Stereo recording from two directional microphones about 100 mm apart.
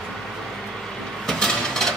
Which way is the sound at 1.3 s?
5° left (ahead or behind).